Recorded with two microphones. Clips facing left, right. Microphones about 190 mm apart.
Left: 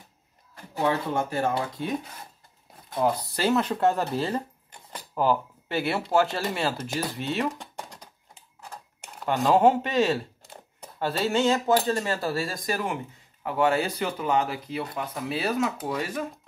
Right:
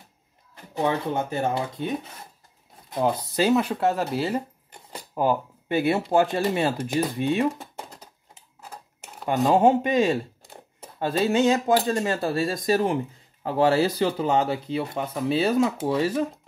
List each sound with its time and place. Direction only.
0.7 s speech: 20° right (ahead or behind)
2.9 s speech: 25° right (ahead or behind); by 4.4 s 5° right (ahead or behind)
5.1 s speech: 20° right (ahead or behind)
7.5 s a sound: 5° right (ahead or behind)
9.2 s speech: 20° right (ahead or behind)